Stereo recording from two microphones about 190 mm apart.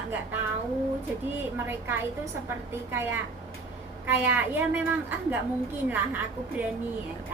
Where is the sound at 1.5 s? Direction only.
10° right (ahead or behind).